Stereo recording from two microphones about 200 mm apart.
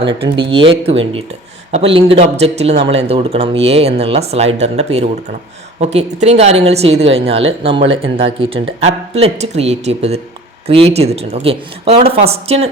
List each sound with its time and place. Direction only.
0.0 s speech: 25° right (ahead or behind)